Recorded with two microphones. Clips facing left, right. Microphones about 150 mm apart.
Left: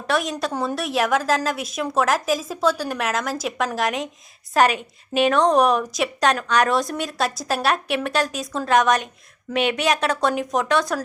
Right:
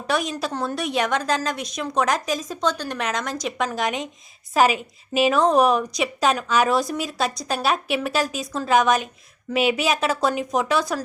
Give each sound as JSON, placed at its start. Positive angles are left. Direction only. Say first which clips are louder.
{"t": 0.1, "sound": "a woman's voice", "louder": "left 1 dB", "side_deg": 0}